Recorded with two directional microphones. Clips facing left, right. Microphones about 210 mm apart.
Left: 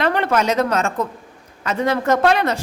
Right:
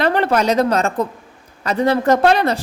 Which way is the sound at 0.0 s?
35° right (ahead or behind).